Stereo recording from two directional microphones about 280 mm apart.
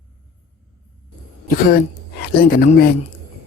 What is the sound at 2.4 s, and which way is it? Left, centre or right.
Speech, left.